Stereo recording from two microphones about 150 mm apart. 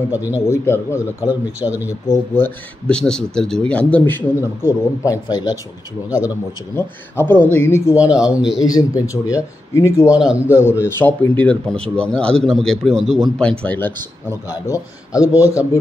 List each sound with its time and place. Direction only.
0.1 s a man's voice: 10° right (ahead or behind)
0.5 s a man's voice: 20° left (ahead or behind)
1.6 s a man's voice: 10° right (ahead or behind)
2.0 s a man's voice: 15° left (ahead or behind)
6.0 s a man's voice: 10° right (ahead or behind)
6.7 s speech: 15° left (ahead or behind)
7.9 s a man's voice: 5° right (ahead or behind)
8.6 s a man's voice: 25° left (ahead or behind)
10.0 s a man's voice: 5° right (ahead or behind)
10.6 s a man's voice: 15° left (ahead or behind)